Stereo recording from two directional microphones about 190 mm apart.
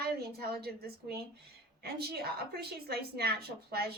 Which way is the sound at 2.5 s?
55° right (ahead or behind).